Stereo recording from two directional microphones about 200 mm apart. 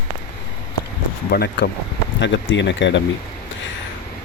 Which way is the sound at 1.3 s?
50° left (ahead or behind).